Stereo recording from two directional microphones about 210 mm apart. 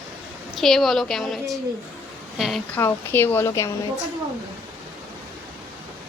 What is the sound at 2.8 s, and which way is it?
Speech, 10° left (ahead or behind).